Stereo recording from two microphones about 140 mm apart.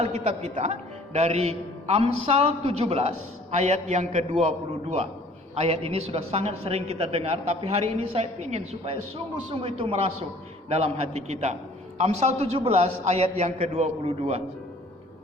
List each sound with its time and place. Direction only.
0.0 s a man's voice: 55° right (ahead or behind)
3.5 s a man's voice: 55° right (ahead or behind)